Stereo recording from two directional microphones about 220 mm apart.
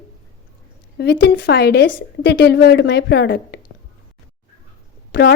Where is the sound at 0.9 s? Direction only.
50° left (ahead or behind).